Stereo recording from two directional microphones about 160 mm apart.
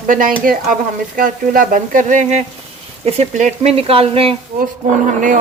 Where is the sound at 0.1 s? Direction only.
60° right (ahead or behind).